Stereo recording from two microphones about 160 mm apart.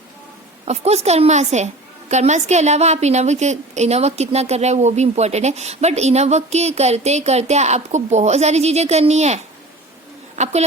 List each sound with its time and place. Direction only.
0.6 s a woman's voice: 40° right (ahead or behind)